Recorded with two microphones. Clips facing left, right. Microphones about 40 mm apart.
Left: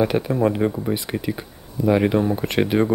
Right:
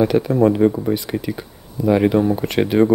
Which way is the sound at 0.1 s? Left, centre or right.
Centre.